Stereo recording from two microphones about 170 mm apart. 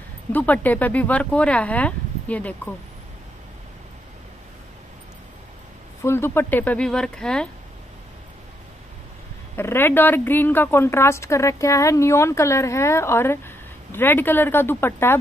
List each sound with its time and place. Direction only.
0.3 s a woman's voice: 10° left (ahead or behind)
6.0 s a woman's voice: 15° left (ahead or behind)
9.6 s a woman's voice: 15° left (ahead or behind)